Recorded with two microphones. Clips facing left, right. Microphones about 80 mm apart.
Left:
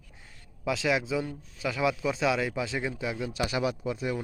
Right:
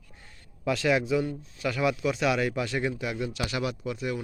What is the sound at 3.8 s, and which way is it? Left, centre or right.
Speech, left.